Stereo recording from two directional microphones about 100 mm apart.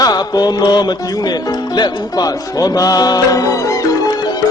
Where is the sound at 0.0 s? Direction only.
40° left (ahead or behind).